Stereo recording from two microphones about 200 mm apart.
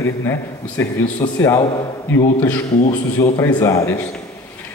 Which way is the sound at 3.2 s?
15° left (ahead or behind).